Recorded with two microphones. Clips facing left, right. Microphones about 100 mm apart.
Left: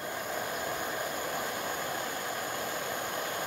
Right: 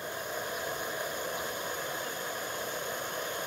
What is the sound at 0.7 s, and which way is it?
Vehicle, 70° left (ahead or behind).